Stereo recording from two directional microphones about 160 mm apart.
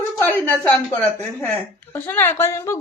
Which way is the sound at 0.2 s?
10° left (ahead or behind).